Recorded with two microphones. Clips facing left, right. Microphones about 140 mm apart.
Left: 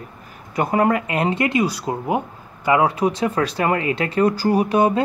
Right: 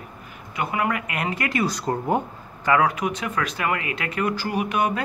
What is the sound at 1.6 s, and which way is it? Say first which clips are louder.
Speech: left 2 dB; 10° left (ahead or behind).